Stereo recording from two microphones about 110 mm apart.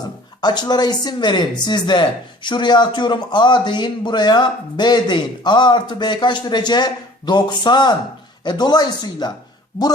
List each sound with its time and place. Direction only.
0.4 s speech: 40° left (ahead or behind)